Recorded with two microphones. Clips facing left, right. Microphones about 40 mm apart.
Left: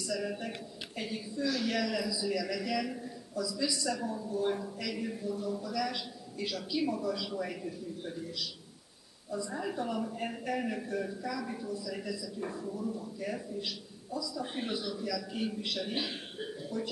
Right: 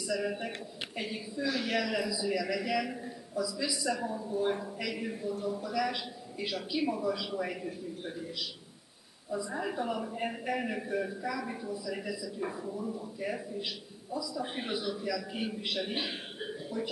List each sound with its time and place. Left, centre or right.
0.0 s a man's voice: centre